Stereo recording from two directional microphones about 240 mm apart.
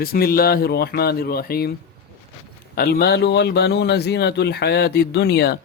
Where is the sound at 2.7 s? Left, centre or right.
Left.